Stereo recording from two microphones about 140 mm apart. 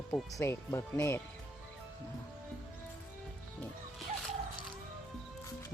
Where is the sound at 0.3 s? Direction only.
20° left (ahead or behind).